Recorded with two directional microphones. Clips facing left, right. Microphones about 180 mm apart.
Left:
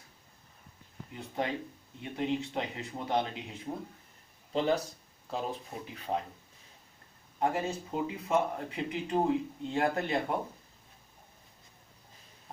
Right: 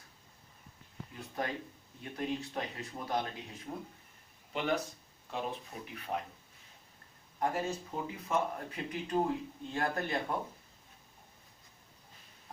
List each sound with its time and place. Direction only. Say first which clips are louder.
1.1 s speech: left 4 dB; 20° left (ahead or behind)
4.5 s speech: left 4 dB; 35° left (ahead or behind)
7.3 s speech: left 3 dB; 20° left (ahead or behind)